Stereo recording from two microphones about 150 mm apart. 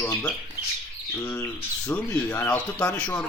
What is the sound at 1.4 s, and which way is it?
Speech, 10° left (ahead or behind).